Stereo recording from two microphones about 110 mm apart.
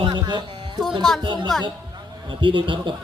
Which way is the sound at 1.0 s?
5° left (ahead or behind).